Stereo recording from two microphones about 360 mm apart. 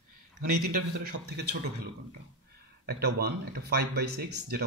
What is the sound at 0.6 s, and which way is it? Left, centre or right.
Speech, right.